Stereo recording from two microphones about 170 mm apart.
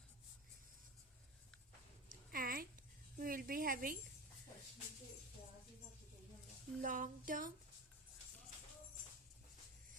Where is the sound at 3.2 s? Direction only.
55° right (ahead or behind).